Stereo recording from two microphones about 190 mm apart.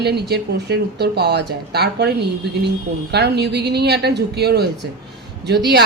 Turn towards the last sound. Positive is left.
turn(degrees=-60)  # may be behind; listen again after turning